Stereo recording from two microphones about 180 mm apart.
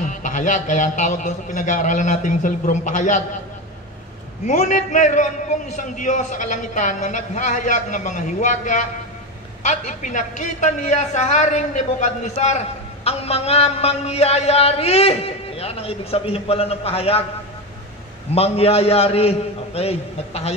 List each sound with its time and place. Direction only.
0.2 s a man's voice: 45° left (ahead or behind)
4.5 s a man's voice: 45° left (ahead or behind)
18.3 s a woman's voice: 35° left (ahead or behind)